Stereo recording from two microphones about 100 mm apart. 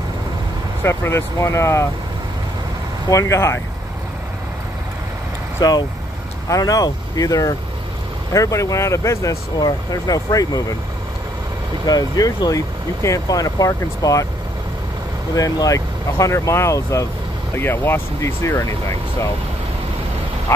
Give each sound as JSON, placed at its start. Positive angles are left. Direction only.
{"t": 0.8, "sound": "speech", "side_deg": 30}
{"t": 3.1, "sound": "speech", "side_deg": 30}
{"t": 5.6, "sound": "speech", "side_deg": 40}
{"t": 9.6, "sound": "speech", "side_deg": 40}
{"t": 11.8, "sound": "speech", "side_deg": 40}
{"t": 15.3, "sound": "speech", "side_deg": 35}